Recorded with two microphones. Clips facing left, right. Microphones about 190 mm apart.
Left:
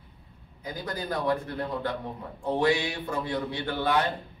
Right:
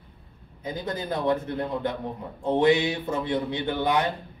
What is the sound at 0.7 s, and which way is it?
A man's voice, 25° right (ahead or behind).